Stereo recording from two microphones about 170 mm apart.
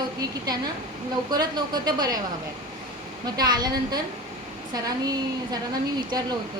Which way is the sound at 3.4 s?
25° right (ahead or behind).